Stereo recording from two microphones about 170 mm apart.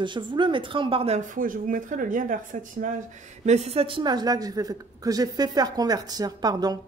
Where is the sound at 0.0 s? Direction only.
30° right (ahead or behind).